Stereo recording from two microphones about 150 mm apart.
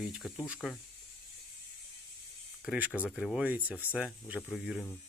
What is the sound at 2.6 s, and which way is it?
Speech, 10° right (ahead or behind).